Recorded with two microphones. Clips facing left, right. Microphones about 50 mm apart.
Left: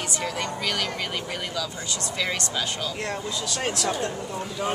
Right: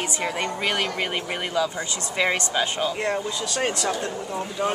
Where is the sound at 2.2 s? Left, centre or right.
Right.